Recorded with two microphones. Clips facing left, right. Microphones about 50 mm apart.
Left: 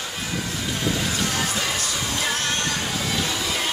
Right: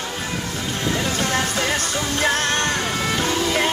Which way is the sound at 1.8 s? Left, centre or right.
Right.